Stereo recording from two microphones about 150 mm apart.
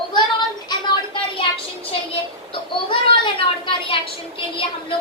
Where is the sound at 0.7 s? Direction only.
30° left (ahead or behind).